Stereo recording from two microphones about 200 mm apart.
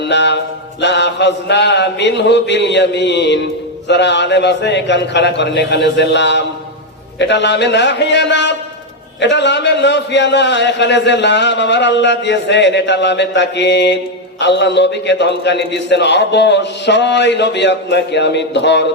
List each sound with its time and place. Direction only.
0.0 s mantra: 60° left (ahead or behind)
0.8 s a man's voice: 60° left (ahead or behind)